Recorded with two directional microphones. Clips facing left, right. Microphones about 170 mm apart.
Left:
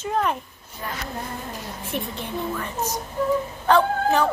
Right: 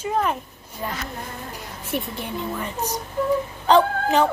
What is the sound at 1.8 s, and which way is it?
Speech, 10° right (ahead or behind).